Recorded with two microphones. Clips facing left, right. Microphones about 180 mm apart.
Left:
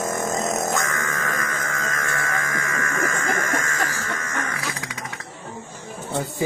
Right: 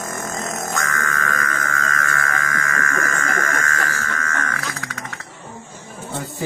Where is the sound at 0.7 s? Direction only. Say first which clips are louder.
Even; 20° left (ahead or behind).